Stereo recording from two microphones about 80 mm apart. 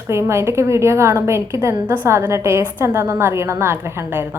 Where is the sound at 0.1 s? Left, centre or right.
Right.